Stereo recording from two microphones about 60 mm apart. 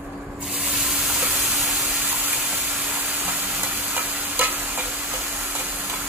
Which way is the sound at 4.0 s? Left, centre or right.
Right.